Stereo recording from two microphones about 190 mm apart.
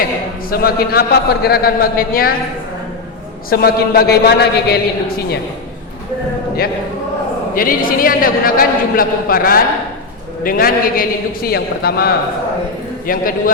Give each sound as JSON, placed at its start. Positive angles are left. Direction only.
{"t": 0.5, "sound": "a man's voice", "side_deg": 55}
{"t": 3.5, "sound": "a man's voice", "side_deg": 55}
{"t": 7.5, "sound": "a man's voice", "side_deg": 50}